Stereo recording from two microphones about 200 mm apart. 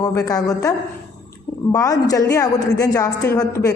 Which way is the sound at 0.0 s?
15° left (ahead or behind).